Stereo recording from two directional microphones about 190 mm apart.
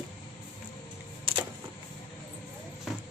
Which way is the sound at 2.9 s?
Centre (ahead or behind).